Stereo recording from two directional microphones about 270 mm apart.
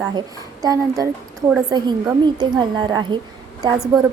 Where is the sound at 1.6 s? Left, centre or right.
Centre.